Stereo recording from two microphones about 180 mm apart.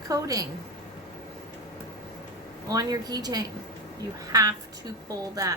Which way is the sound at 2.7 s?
20° right (ahead or behind).